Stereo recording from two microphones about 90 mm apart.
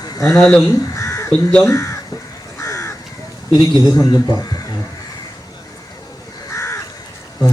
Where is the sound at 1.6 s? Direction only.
30° left (ahead or behind).